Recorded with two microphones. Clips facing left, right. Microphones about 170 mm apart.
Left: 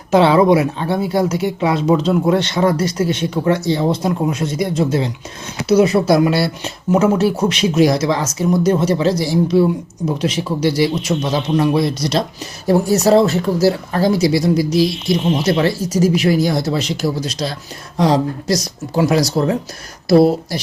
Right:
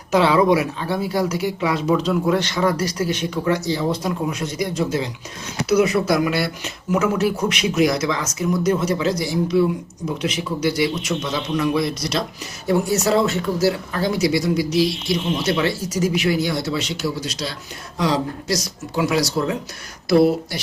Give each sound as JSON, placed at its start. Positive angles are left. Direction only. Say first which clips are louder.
{"t": 0.1, "sound": "speech", "louder": "left 4 dB", "side_deg": 25}